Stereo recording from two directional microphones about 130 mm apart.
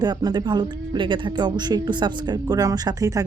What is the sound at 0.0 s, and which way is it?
Speech, 30° right (ahead or behind).